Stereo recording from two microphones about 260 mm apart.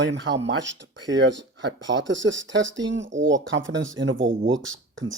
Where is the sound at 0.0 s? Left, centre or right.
Right.